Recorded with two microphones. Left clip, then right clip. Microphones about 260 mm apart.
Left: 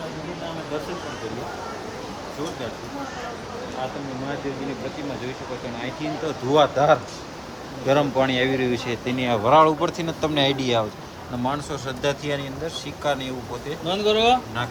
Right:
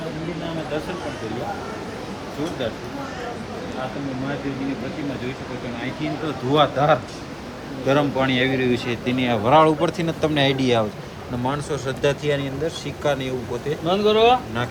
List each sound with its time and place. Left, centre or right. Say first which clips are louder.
6.0 s speech: even; left
13.9 s speech: right 3 dB; centre